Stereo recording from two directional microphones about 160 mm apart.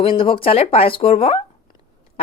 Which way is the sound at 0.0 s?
35° left (ahead or behind).